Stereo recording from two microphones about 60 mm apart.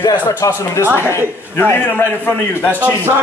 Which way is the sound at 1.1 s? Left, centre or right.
Left.